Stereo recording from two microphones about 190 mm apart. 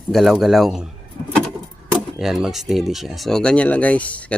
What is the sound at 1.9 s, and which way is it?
Speech, centre (ahead or behind).